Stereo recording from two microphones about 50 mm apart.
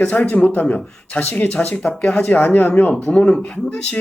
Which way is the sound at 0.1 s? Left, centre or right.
Left.